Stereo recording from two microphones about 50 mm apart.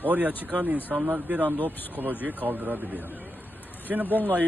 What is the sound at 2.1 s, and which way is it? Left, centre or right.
Speech, left.